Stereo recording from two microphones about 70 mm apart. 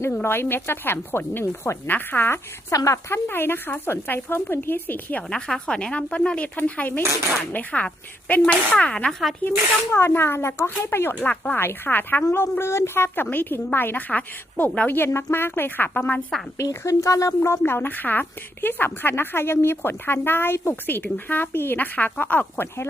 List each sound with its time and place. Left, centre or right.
0.1 s speech: left
2.7 s speech: left
3.2 s speech: left
5.3 s speech: centre
9.9 s speech: left; by 14.8 s centre
14.8 s speech: left
16.6 s speech: left
17.6 s speech: left